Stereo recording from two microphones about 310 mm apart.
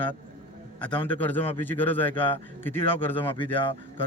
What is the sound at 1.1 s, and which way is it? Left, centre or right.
A man's voice, centre.